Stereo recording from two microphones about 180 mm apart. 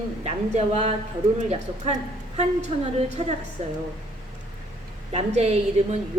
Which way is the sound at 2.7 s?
35° right (ahead or behind).